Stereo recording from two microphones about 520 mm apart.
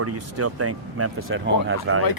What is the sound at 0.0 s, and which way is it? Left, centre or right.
Speech, right.